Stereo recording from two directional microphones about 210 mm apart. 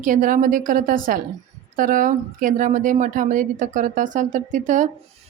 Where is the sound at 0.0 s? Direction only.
40° right (ahead or behind).